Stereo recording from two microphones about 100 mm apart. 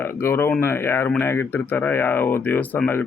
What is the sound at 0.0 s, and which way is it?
Speech, 25° left (ahead or behind).